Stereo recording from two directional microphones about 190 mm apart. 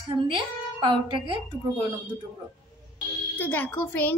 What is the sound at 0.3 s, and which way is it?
Speech, 25° right (ahead or behind).